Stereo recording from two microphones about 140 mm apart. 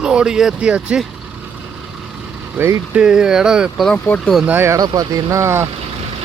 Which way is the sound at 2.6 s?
15° right (ahead or behind).